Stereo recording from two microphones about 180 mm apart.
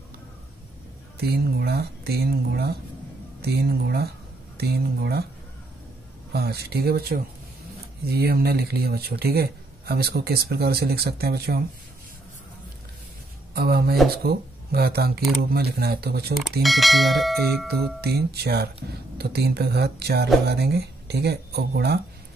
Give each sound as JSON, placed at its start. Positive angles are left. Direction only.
{"t": 1.1, "sound": "speech", "side_deg": -60}
{"t": 6.3, "sound": "speech", "side_deg": -65}
{"t": 13.5, "sound": "speech", "side_deg": -60}
{"t": 16.6, "sound": "speech", "side_deg": 0}
{"t": 17.6, "sound": "speech", "side_deg": -60}